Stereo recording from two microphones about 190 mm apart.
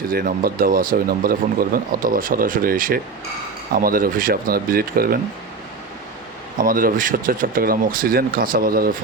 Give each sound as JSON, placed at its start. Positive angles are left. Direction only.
{"t": 0.1, "sound": "speech", "side_deg": -50}
{"t": 6.6, "sound": "speech", "side_deg": -45}